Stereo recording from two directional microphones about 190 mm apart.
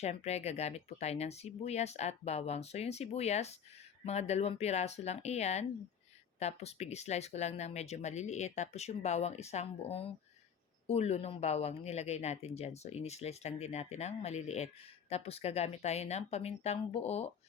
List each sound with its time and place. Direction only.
0.0 s speech: 35° left (ahead or behind)